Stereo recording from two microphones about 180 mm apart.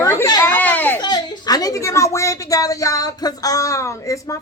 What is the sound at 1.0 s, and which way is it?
A woman's voice, 25° left (ahead or behind).